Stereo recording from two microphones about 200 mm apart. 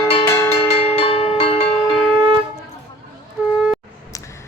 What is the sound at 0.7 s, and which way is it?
Cowbell, 30° left (ahead or behind).